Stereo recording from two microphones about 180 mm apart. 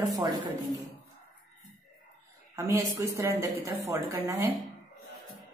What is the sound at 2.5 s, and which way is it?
A woman's voice, 15° right (ahead or behind).